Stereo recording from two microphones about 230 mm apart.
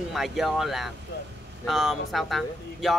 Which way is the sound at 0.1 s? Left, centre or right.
Centre.